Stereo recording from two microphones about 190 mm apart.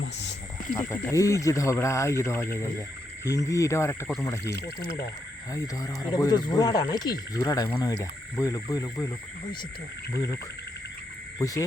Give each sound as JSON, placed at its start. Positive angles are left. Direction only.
{"t": 0.0, "sound": "wild animals", "side_deg": 65}
{"t": 0.8, "sound": "speech", "side_deg": 15}
{"t": 5.5, "sound": "speech", "side_deg": 15}
{"t": 10.1, "sound": "speech", "side_deg": 15}
{"t": 11.3, "sound": "cricket", "side_deg": 20}